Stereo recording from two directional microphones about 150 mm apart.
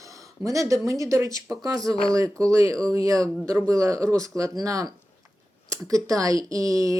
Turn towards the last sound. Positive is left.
turn(degrees=-20)  # may be behind; listen again after turning